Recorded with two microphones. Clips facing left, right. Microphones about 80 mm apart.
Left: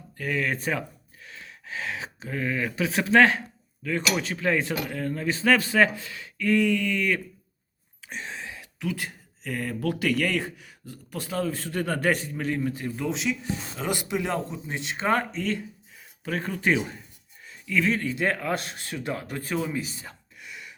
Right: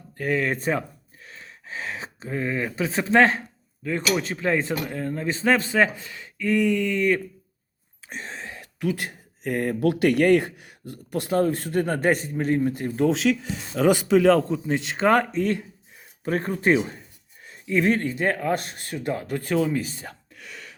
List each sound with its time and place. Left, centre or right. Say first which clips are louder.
0.2 s speech: right 4 dB; right
8.1 s a sound: right 1 dB; right
9.0 s speech: right 2 dB; right
11.7 s speech: right 3 dB; right
12.7 s speech: right 8 dB; right
13.7 s speech: right 12 dB; right
15.0 s speech: right 5 dB; right
16.2 s speech: right 4 dB; right